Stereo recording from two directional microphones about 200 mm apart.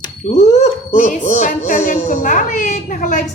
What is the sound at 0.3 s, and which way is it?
Speech, 35° left (ahead or behind).